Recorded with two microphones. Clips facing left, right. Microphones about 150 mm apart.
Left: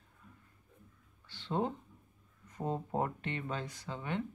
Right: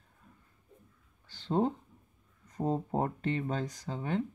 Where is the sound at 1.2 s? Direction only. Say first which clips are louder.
Right 5 dB; 45° right (ahead or behind).